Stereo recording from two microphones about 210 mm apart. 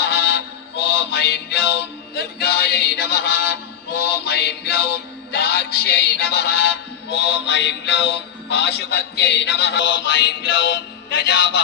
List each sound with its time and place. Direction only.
0.0 s music: 50° left (ahead or behind)